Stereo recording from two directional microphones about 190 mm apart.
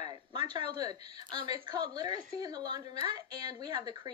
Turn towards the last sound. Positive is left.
turn(degrees=-20)  # may be behind; listen again after turning